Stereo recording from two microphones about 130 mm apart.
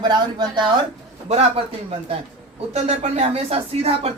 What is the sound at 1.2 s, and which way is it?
Speech, 55° right (ahead or behind).